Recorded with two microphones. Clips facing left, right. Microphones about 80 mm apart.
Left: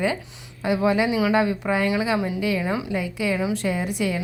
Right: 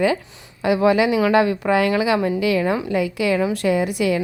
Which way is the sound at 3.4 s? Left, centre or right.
Right.